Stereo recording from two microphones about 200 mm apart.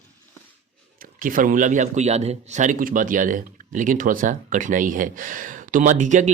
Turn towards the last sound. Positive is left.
turn(degrees=-40)  # may be behind; listen again after turning